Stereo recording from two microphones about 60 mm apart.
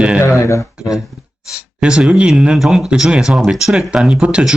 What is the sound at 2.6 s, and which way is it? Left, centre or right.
Speech, centre.